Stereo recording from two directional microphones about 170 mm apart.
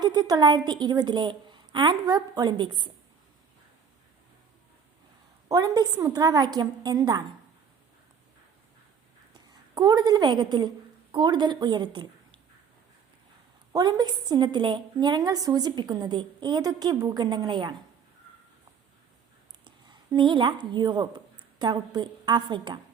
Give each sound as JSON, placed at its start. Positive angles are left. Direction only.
{"t": 0.0, "sound": "a woman's voice", "side_deg": -25}
{"t": 5.5, "sound": "a woman's voice", "side_deg": -20}
{"t": 9.3, "sound": "a woman's voice", "side_deg": -25}
{"t": 13.7, "sound": "a woman's voice", "side_deg": -25}
{"t": 19.6, "sound": "a woman's voice", "side_deg": -25}